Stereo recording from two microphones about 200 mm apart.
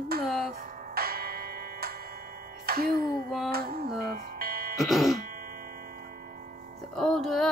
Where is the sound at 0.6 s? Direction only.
45° right (ahead or behind).